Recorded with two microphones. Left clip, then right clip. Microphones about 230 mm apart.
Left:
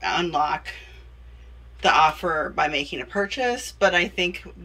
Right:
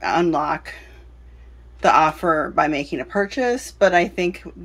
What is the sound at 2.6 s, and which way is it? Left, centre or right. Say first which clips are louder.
Speech: right 4 dB; centre.